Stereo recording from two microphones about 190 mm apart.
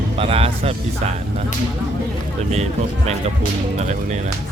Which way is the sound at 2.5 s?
35° right (ahead or behind).